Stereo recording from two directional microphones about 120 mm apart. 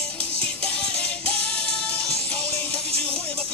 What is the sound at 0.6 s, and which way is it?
Music, 10° left (ahead or behind).